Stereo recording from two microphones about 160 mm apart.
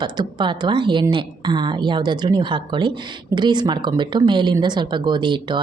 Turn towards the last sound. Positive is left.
turn(degrees=-30)  # may be behind; listen again after turning